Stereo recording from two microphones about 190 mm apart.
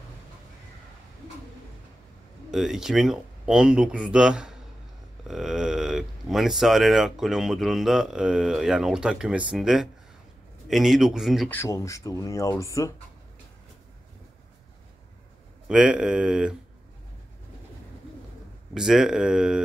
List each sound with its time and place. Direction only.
2.5 s speech: centre (ahead or behind)
11.5 s speech: 15° left (ahead or behind)
15.7 s speech: 5° right (ahead or behind)
18.7 s speech: centre (ahead or behind)